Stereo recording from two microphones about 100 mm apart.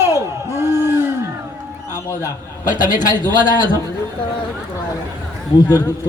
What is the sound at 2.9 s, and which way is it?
Speech, 45° left (ahead or behind).